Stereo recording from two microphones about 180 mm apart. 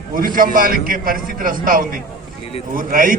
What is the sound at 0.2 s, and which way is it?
A man's voice, 50° right (ahead or behind).